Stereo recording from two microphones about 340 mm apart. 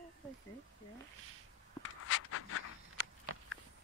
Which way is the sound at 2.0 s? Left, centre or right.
Left.